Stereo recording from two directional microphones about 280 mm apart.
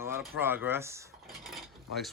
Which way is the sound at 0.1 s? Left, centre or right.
Centre.